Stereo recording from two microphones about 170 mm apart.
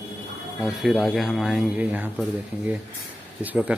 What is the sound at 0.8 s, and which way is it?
Speech, centre (ahead or behind).